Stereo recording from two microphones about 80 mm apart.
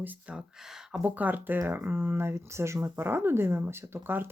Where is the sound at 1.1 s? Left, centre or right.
Right.